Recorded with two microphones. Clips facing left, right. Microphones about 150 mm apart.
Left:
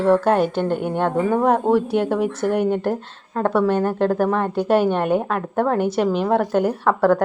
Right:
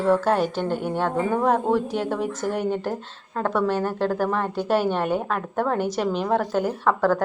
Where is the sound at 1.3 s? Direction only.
10° left (ahead or behind).